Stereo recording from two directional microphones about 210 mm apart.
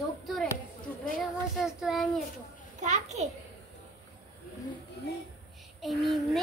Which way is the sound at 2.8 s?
35° right (ahead or behind).